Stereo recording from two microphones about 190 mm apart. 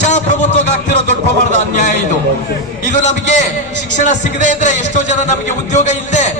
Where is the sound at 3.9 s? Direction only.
40° left (ahead or behind).